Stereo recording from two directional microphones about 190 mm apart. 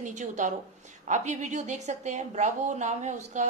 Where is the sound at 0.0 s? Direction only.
40° right (ahead or behind).